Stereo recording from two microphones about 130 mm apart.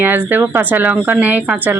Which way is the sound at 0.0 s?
15° right (ahead or behind).